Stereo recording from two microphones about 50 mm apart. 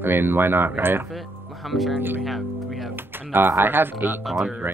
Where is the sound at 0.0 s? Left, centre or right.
Right.